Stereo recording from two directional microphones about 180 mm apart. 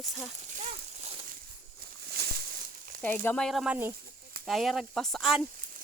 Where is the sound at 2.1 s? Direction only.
60° right (ahead or behind).